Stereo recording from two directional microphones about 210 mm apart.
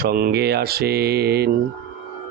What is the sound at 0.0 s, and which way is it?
A man's voice, 45° right (ahead or behind).